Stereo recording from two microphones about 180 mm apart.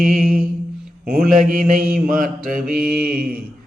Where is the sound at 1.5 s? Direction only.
50° right (ahead or behind).